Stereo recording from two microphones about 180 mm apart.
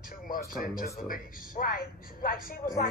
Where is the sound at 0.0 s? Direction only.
50° left (ahead or behind).